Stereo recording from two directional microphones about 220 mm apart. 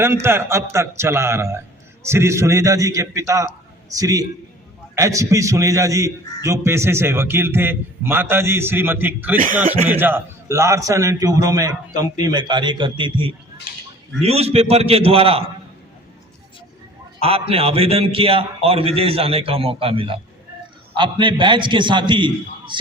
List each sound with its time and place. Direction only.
0.0 s a man's voice: 10° right (ahead or behind); by 15.4 s 25° right (ahead or behind)
17.2 s a man's voice: 25° right (ahead or behind)